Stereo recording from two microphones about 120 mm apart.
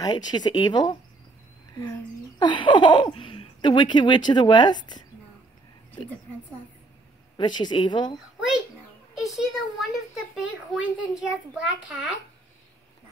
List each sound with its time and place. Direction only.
0.0 s speech: 35° left (ahead or behind)
7.3 s speech: 40° left (ahead or behind)
9.1 s a woman's voice: centre (ahead or behind)